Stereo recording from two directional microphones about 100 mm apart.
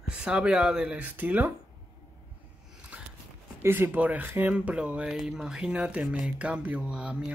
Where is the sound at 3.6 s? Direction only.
25° right (ahead or behind).